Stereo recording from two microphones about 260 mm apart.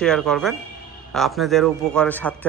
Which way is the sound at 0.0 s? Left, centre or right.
Centre.